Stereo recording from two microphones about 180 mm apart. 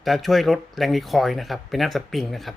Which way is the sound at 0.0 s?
Centre (ahead or behind).